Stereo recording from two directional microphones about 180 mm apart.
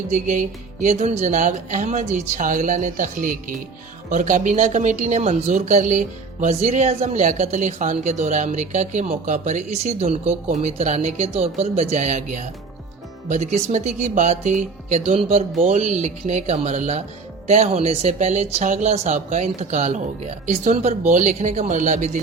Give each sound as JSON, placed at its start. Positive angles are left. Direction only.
{"t": 0.1, "sound": "speech", "side_deg": -40}